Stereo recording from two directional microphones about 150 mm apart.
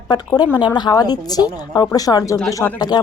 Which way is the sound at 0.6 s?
30° left (ahead or behind).